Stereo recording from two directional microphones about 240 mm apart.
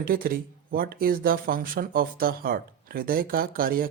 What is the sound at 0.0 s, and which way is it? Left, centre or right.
Speech, right.